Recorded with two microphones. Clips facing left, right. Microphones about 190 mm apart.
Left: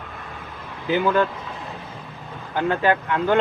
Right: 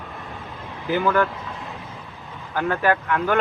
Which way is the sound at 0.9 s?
20° left (ahead or behind).